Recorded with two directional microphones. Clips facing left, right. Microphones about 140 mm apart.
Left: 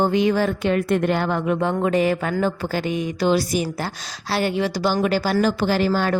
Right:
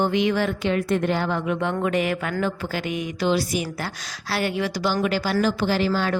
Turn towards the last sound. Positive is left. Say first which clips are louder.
# left 2 dB
turn(degrees=45)  # may be behind; listen again after turning